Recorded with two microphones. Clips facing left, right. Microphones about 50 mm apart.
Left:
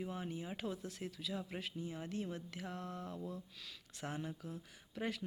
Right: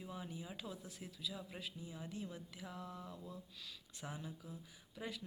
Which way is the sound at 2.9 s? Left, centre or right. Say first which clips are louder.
Left 5 dB; centre.